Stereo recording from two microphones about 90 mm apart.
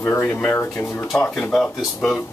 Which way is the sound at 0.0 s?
25° left (ahead or behind).